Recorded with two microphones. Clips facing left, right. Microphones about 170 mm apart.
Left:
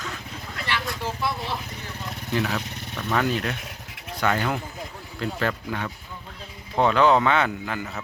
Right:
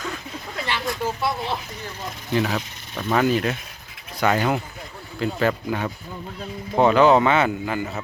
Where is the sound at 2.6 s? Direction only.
60° left (ahead or behind).